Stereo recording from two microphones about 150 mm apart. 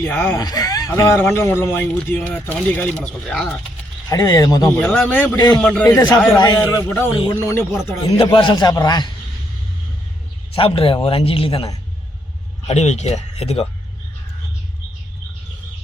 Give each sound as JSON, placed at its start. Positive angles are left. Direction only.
{"t": 0.0, "sound": "a man's voice", "side_deg": 15}
{"t": 0.3, "sound": "a man's voice", "side_deg": 25}
{"t": 4.1, "sound": "a man's voice", "side_deg": 25}
{"t": 4.8, "sound": "a man's voice", "side_deg": 5}
{"t": 5.8, "sound": "a man's voice", "side_deg": 25}
{"t": 6.8, "sound": "a man's voice", "side_deg": 10}
{"t": 8.0, "sound": "a man's voice", "side_deg": 35}
{"t": 10.5, "sound": "a man's voice", "side_deg": 40}